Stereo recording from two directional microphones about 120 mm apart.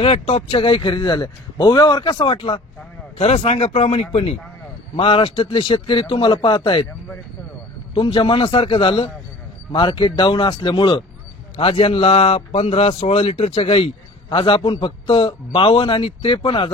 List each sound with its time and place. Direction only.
0.0 s speech: 60° left (ahead or behind)
0.5 s a man's voice: 45° left (ahead or behind)
2.0 s a man's voice: 50° left (ahead or behind)
4.9 s a man's voice: 45° left (ahead or behind)
7.9 s a man's voice: 45° left (ahead or behind)